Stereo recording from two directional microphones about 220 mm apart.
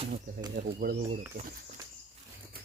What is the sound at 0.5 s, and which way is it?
Speech, 40° right (ahead or behind).